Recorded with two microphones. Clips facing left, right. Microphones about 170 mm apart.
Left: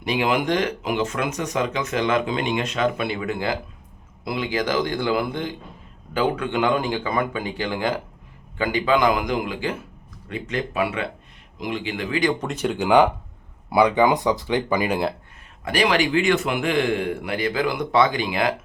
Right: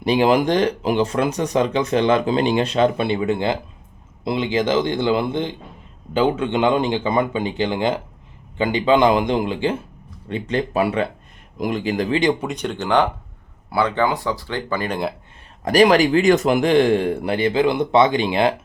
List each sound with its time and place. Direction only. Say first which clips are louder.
0.0 s speech: right 6 dB; 35° right (ahead or behind)
12.4 s speech: left 1 dB; centre (ahead or behind)
15.6 s speech: right 7 dB; 40° right (ahead or behind)